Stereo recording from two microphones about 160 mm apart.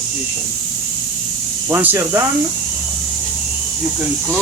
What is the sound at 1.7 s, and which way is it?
Speech, 15° right (ahead or behind).